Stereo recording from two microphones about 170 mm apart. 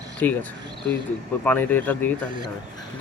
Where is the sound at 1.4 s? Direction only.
10° left (ahead or behind).